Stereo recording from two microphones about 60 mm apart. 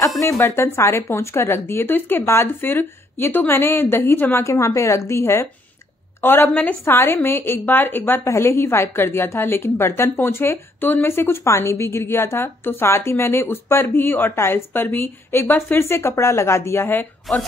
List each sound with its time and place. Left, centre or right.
0.2 s a woman's voice: left
4.4 s a woman's voice: left
6.2 s a woman's voice: left
6.8 s a woman's voice: left
8.3 s a woman's voice: left
11.4 s a woman's voice: left